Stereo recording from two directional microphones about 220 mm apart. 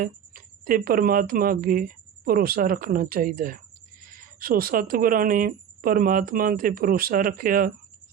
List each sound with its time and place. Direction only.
0.0 s speech: 40° right (ahead or behind)